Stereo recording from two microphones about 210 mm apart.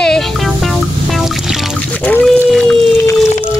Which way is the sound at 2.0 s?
5° left (ahead or behind).